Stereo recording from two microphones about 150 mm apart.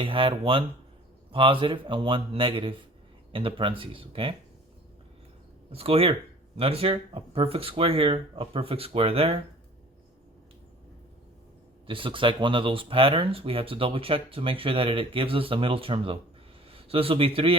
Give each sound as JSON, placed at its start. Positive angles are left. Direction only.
{"t": 0.0, "sound": "speech", "side_deg": -35}
{"t": 5.7, "sound": "speech", "side_deg": -40}
{"t": 11.9, "sound": "speech", "side_deg": -35}